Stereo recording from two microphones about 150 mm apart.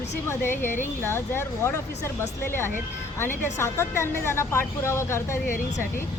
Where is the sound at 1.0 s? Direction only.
15° left (ahead or behind).